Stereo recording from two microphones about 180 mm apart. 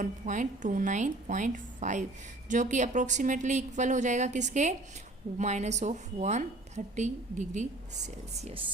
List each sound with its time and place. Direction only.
0.0 s a woman's voice: 45° right (ahead or behind)